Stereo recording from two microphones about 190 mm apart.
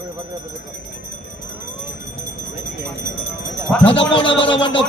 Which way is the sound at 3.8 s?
25° left (ahead or behind).